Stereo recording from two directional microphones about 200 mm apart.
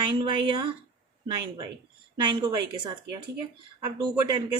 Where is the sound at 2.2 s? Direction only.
20° right (ahead or behind).